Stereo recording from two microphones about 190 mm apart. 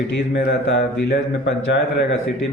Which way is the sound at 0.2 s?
65° left (ahead or behind).